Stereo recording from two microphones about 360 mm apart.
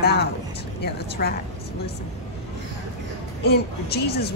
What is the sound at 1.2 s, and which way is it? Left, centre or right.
Speech, left.